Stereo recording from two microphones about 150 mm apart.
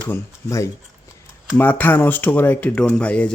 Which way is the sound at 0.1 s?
20° left (ahead or behind).